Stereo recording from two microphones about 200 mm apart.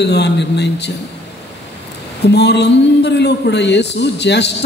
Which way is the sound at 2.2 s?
55° left (ahead or behind).